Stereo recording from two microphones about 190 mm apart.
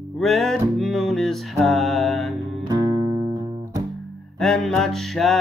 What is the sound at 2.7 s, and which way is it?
Music, 20° right (ahead or behind).